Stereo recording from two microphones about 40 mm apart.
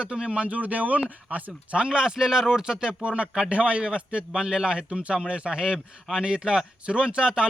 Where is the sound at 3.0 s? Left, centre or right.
Right.